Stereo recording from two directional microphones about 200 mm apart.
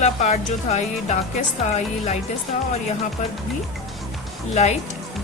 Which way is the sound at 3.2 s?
40° left (ahead or behind).